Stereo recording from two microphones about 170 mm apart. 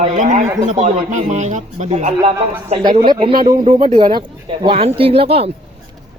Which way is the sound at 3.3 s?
55° right (ahead or behind).